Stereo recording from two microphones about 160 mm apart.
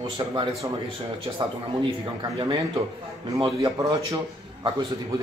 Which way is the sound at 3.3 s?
30° right (ahead or behind).